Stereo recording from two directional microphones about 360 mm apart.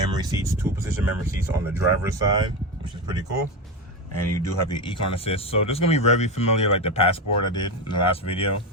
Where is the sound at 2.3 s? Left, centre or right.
Centre.